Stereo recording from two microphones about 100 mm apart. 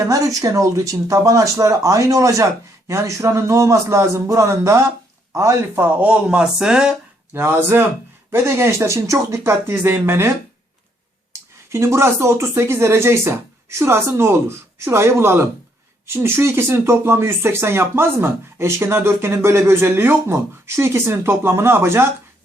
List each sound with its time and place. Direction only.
0.4 s speech: 35° right (ahead or behind); by 6.9 s 10° right (ahead or behind)
7.3 s speech: 25° right (ahead or behind)